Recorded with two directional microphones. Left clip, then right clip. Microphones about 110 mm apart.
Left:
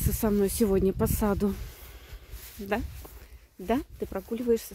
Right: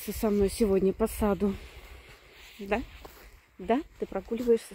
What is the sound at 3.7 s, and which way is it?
Speech, 30° left (ahead or behind).